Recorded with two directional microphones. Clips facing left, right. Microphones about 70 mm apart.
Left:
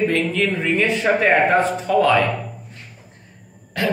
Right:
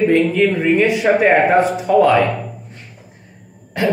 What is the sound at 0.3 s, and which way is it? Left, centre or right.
A man's voice, centre.